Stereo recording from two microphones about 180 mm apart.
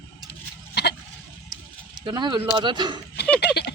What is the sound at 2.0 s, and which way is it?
Speech, 25° right (ahead or behind).